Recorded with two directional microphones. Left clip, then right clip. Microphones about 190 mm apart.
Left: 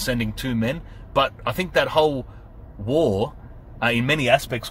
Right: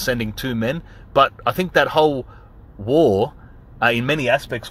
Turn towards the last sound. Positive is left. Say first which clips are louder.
# even
turn(degrees=-25)  # may be behind; listen again after turning